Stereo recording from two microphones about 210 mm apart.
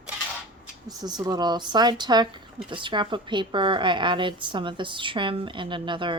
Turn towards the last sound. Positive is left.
turn(degrees=-25)  # may be behind; listen again after turning